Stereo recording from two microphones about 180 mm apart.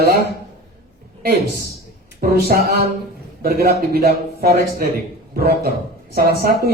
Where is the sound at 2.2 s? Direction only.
60° right (ahead or behind).